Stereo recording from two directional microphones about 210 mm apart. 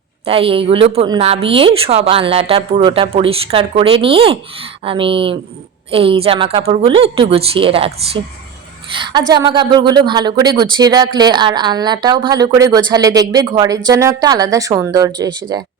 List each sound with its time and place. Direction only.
0.3 s a woman's voice: 25° right (ahead or behind)